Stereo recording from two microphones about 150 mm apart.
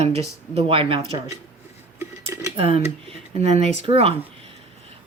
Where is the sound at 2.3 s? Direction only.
20° right (ahead or behind).